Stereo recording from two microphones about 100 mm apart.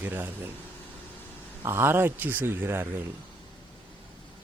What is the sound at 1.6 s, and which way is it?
Speech, 25° right (ahead or behind).